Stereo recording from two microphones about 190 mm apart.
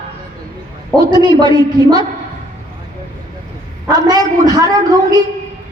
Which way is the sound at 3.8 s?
20° right (ahead or behind).